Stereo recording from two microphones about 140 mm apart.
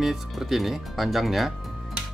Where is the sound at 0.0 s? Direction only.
Centre (ahead or behind).